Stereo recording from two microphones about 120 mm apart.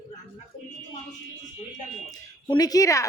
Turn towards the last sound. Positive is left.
turn(degrees=30)  # may be behind; listen again after turning